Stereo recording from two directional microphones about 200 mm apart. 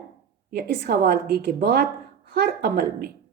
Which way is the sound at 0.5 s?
50° right (ahead or behind).